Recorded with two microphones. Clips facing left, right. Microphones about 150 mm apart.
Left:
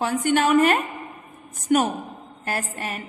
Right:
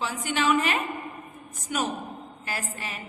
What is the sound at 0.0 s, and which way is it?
A woman's voice, 55° left (ahead or behind).